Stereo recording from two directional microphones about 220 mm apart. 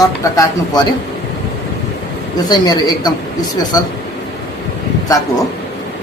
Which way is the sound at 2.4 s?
15° left (ahead or behind).